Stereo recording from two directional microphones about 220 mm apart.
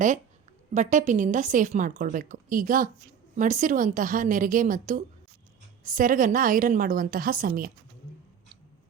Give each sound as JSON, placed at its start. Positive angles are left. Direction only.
{"t": 0.7, "sound": "a woman's voice", "side_deg": -35}